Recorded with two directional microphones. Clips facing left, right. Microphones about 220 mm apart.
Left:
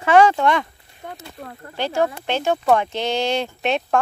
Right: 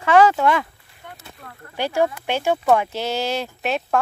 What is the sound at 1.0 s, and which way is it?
Speech, 35° left (ahead or behind).